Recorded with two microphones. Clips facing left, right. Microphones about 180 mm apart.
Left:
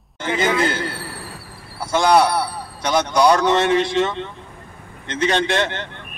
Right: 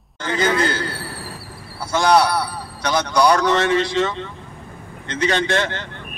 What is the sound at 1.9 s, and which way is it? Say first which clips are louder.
A man's voice: left 1 dB; 25° left (ahead or behind).